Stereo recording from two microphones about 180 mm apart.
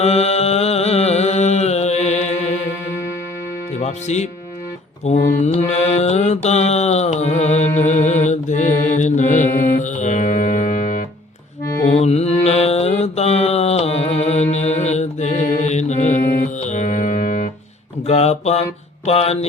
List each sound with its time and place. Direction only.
0.0 s music: 35° left (ahead or behind)
3.7 s mantra: 40° left (ahead or behind)
11.9 s mantra: 35° left (ahead or behind)
18.0 s speech: 35° left (ahead or behind)
19.0 s mantra: 35° left (ahead or behind)